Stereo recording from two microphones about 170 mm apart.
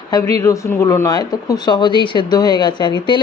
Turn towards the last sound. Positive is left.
turn(degrees=25)  # may be behind; listen again after turning